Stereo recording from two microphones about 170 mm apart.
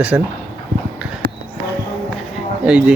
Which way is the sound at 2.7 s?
5° right (ahead or behind).